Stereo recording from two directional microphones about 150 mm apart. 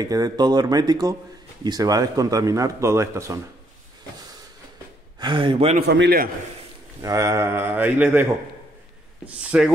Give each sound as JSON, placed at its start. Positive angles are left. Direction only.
{"t": 0.0, "sound": "a man's voice", "side_deg": -25}
{"t": 5.2, "sound": "speech", "side_deg": -35}
{"t": 5.9, "sound": "a man's voice", "side_deg": -90}
{"t": 7.0, "sound": "speech", "side_deg": -20}